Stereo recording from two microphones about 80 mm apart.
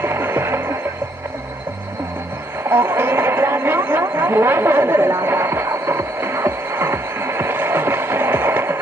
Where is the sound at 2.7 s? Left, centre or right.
Right.